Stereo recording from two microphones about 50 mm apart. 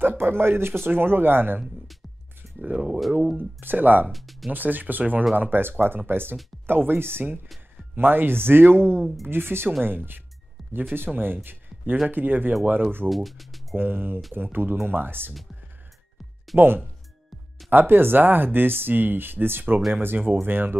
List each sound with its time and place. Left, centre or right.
0.0 s speech: right
2.6 s speech: right
4.1 s speech: centre
4.5 s speech: right
9.0 s speech: centre
9.3 s speech: right
13.1 s speech: centre
13.7 s speech: right
16.5 s speech: right